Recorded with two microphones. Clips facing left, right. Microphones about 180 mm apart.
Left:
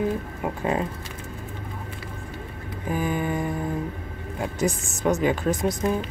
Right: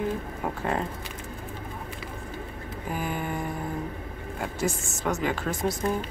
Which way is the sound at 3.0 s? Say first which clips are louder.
Left 6 dB; 15° left (ahead or behind).